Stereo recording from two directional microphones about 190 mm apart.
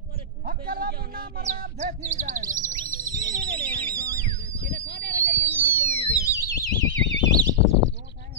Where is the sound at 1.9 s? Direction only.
40° right (ahead or behind).